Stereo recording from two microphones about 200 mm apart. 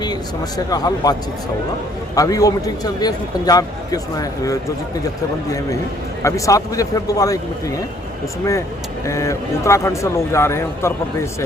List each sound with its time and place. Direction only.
0.0 s speech: 20° left (ahead or behind)
2.1 s a man's voice: 15° left (ahead or behind)
6.2 s a man's voice: 15° left (ahead or behind)
9.0 s a man's voice: 15° left (ahead or behind)